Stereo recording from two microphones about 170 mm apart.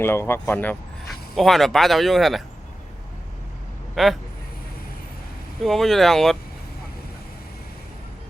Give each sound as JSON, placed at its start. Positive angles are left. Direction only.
{"t": 0.0, "sound": "speech", "side_deg": 15}
{"t": 3.9, "sound": "speech", "side_deg": 0}
{"t": 5.6, "sound": "speech", "side_deg": 0}